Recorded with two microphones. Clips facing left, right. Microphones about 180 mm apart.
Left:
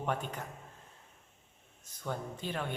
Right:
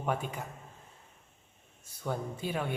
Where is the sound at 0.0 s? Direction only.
10° right (ahead or behind).